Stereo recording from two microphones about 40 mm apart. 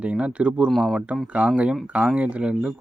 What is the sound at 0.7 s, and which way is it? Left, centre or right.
Speech, centre.